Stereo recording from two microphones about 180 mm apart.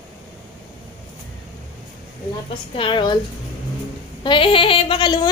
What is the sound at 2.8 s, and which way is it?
Speech, 25° left (ahead or behind).